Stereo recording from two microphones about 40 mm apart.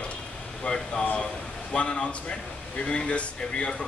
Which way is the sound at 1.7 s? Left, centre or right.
Left.